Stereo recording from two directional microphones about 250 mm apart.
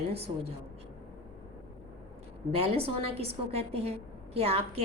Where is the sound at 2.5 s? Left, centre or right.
Right.